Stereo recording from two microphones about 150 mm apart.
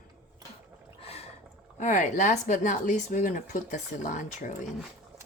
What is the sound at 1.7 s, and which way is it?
Speech, 55° left (ahead or behind).